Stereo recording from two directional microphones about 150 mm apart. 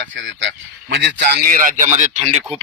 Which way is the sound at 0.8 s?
85° right.